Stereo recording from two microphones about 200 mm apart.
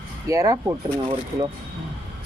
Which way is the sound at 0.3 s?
15° right (ahead or behind).